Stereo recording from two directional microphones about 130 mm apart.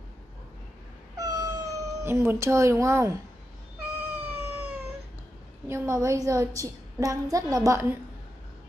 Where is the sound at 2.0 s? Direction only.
20° right (ahead or behind).